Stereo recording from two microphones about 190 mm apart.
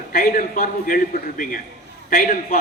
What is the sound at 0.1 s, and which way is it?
A man's voice, 50° left (ahead or behind).